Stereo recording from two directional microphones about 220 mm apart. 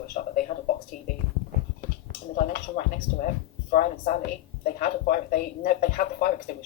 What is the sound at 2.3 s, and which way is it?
Speech, 40° left (ahead or behind).